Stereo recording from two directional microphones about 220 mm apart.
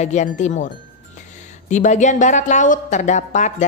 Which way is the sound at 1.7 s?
35° left (ahead or behind).